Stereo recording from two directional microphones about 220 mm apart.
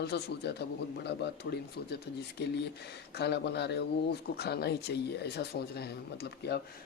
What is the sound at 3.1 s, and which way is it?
Speech, 50° left (ahead or behind).